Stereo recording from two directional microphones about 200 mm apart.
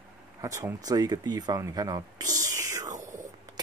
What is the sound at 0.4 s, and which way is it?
Speech, 15° right (ahead or behind).